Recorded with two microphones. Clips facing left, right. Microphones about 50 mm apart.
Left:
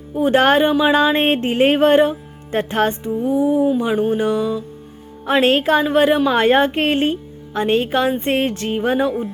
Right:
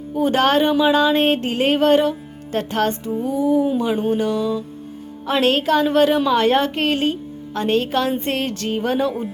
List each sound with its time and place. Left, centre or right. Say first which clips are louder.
0.1 s speech: left 1 dB; centre
0.3 s speech: left 3 dB; left
3.2 s music: left 2 dB; centre
5.2 s speech: left 3 dB; left